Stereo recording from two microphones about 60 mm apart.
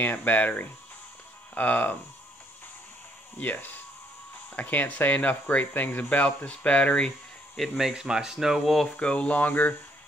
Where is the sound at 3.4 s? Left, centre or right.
Left.